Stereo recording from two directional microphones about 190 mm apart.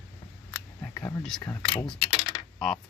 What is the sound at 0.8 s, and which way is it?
Speech, 10° left (ahead or behind).